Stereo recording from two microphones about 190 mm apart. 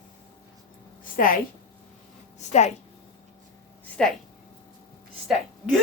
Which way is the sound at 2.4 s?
40° left (ahead or behind).